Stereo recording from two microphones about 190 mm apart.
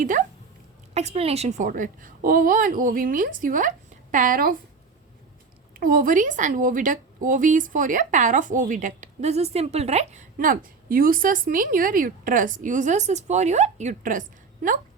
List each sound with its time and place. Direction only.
0.0 s a woman's voice: 40° right (ahead or behind)
5.7 s a woman's voice: 50° right (ahead or behind)